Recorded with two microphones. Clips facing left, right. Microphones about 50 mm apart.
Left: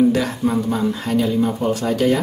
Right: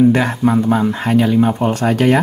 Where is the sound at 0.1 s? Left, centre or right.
Right.